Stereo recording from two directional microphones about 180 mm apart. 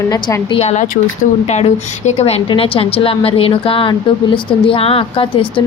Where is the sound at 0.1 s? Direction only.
20° left (ahead or behind).